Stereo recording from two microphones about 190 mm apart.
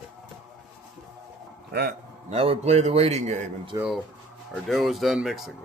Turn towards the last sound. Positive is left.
turn(degrees=0)  # may be behind; listen again after turning